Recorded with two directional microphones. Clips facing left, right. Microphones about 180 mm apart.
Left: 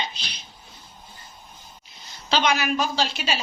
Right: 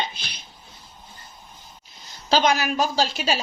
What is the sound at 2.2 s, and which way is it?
A woman's voice, 40° right (ahead or behind).